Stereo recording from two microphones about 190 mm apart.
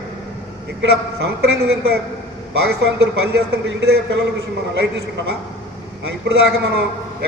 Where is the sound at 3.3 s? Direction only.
60° right (ahead or behind).